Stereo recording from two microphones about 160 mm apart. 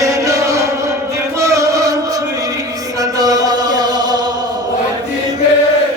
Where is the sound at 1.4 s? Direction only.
20° right (ahead or behind).